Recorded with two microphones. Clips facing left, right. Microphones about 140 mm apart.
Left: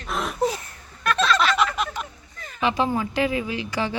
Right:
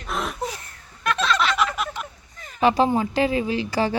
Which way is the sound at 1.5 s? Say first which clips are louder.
Left 1 dB; centre (ahead or behind).